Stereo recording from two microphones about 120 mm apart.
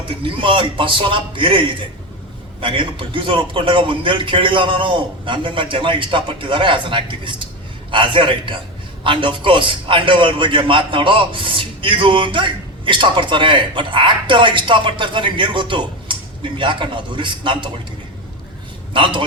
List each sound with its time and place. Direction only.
0.1 s a man's voice: 45° right (ahead or behind)
18.9 s a man's voice: 45° right (ahead or behind)